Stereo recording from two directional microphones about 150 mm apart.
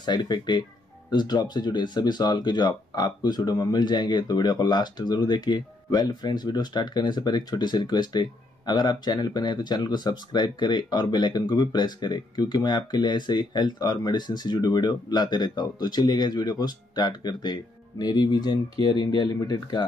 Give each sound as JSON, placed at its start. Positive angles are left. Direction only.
{"t": 0.0, "sound": "speech", "side_deg": 30}